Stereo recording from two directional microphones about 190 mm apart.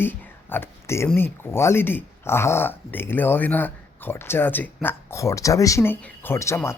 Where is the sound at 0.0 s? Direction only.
10° left (ahead or behind).